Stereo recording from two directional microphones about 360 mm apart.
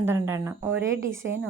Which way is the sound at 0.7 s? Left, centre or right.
Right.